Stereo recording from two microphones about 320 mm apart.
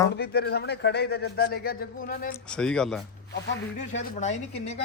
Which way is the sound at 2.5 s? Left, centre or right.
Centre.